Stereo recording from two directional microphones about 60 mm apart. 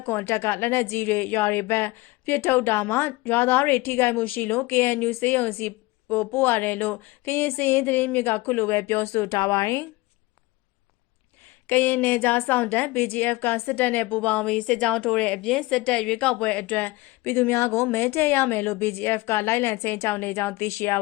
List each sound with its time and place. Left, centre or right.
0.0 s a woman's voice: left
9.3 s speech: left
11.7 s a woman's voice: left
17.2 s a woman's voice: left